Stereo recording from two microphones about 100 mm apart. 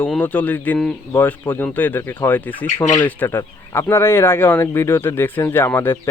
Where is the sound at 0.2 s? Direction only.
15° left (ahead or behind).